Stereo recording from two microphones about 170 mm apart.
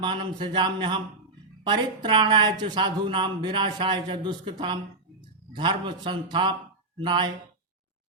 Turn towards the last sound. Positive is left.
turn(degrees=-25)  # may be behind; listen again after turning